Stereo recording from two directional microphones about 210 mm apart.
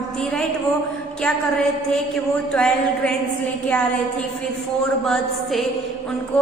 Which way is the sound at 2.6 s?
5° left (ahead or behind).